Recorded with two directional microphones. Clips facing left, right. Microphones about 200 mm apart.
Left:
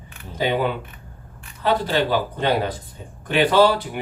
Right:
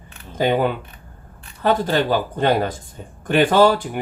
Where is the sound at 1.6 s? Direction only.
45° right (ahead or behind).